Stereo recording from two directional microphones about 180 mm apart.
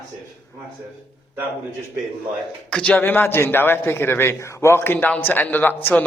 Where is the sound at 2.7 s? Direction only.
5° left (ahead or behind).